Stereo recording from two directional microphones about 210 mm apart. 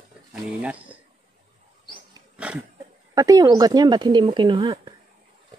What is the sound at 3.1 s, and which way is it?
Speech, 15° right (ahead or behind).